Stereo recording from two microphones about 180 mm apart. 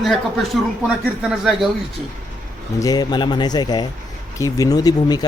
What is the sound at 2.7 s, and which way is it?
A man's voice, 20° left (ahead or behind).